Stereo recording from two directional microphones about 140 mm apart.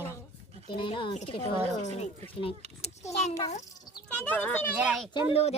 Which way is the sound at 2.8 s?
55° left (ahead or behind).